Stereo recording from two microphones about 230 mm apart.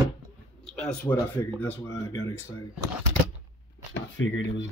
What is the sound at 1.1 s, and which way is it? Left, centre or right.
Speech, centre.